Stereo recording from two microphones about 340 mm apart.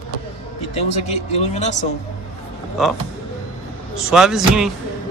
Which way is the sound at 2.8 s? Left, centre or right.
Centre.